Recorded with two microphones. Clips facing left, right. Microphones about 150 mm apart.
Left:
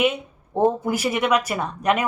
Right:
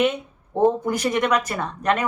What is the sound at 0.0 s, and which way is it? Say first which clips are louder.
Speech: even; 10° left (ahead or behind).